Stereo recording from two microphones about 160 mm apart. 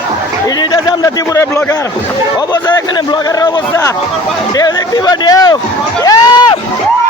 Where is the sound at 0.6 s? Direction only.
25° left (ahead or behind).